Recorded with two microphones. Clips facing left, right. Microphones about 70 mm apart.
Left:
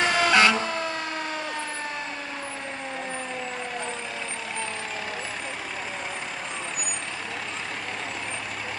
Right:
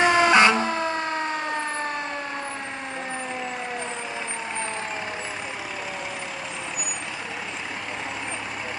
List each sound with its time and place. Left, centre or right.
0.0 s emergency vehicle: right